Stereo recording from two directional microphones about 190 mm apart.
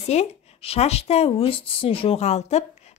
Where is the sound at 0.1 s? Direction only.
35° left (ahead or behind).